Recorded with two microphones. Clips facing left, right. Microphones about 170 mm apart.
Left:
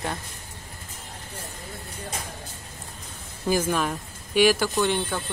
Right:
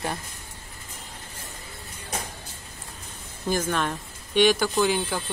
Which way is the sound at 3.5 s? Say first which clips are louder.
Left 2 dB; 5° left (ahead or behind).